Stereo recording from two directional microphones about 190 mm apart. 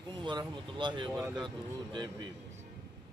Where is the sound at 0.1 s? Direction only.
25° right (ahead or behind).